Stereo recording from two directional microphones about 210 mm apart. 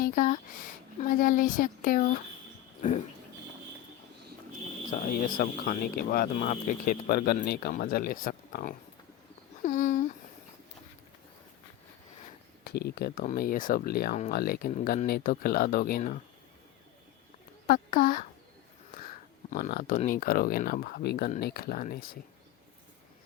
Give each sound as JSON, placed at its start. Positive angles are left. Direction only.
{"t": 0.0, "sound": "a woman's voice", "side_deg": 40}
{"t": 5.4, "sound": "speech", "side_deg": 45}
{"t": 9.6, "sound": "a sound", "side_deg": 35}
{"t": 12.6, "sound": "speech", "side_deg": 50}
{"t": 17.7, "sound": "speech", "side_deg": 45}
{"t": 19.5, "sound": "speech", "side_deg": 45}